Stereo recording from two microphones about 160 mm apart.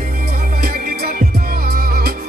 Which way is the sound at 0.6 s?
75° right (ahead or behind).